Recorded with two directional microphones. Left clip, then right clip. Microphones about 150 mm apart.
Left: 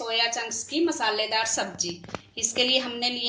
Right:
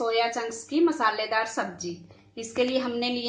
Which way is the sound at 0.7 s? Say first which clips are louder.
Right 2 dB; 55° right (ahead or behind).